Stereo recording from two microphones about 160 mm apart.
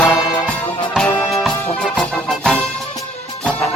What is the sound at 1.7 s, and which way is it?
Music, 5° left (ahead or behind).